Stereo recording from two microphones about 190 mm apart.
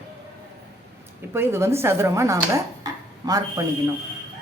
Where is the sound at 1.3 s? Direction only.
15° right (ahead or behind).